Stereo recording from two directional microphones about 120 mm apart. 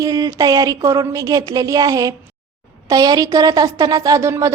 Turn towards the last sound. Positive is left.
turn(degrees=-25)  # may be behind; listen again after turning